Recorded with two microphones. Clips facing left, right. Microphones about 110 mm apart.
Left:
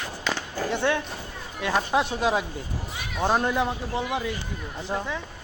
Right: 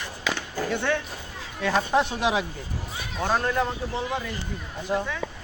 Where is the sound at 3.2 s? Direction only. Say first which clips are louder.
Left 1 dB; 15° left (ahead or behind).